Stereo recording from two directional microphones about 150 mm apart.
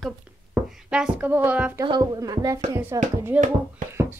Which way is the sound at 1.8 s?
25° right (ahead or behind).